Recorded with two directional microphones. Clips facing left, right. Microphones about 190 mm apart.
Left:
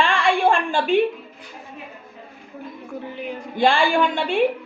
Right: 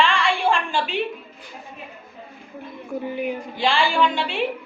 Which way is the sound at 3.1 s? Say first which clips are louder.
Right 6 dB; 10° right (ahead or behind).